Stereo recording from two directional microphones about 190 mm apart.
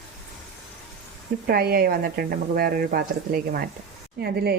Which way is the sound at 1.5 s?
55° right (ahead or behind).